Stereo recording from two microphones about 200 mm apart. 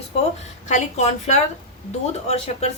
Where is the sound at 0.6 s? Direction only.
35° left (ahead or behind).